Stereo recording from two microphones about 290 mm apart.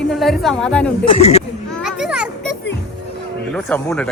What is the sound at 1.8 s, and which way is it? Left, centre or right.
Children playing, centre.